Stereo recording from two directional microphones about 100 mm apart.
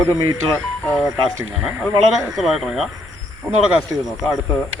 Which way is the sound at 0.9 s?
Centre (ahead or behind).